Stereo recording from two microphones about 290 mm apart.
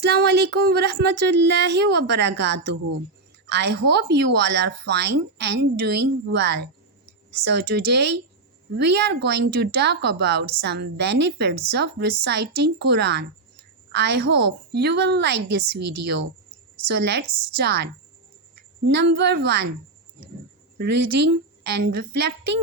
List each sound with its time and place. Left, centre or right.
0.0 s speech: right
15.8 s speech: right
16.9 s speech: right
18.9 s speech: right
20.7 s speech: right